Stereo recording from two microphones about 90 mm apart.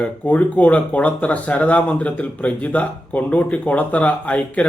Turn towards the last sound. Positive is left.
turn(degrees=15)  # may be behind; listen again after turning